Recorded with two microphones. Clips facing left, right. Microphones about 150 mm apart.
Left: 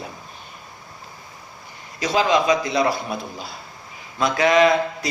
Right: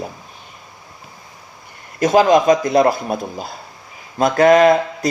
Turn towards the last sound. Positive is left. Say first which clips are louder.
# right 5 dB
turn(degrees=-50)  # may be behind; listen again after turning